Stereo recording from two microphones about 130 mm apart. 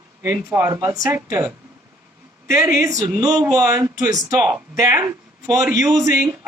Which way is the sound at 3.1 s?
25° right (ahead or behind).